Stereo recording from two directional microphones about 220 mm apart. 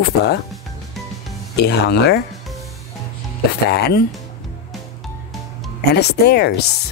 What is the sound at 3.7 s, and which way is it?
Speech, 45° left (ahead or behind).